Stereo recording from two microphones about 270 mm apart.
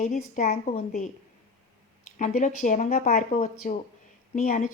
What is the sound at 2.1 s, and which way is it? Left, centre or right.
Speech, left.